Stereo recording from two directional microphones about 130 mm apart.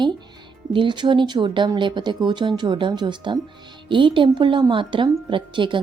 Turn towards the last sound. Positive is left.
turn(degrees=-40)  # may be behind; listen again after turning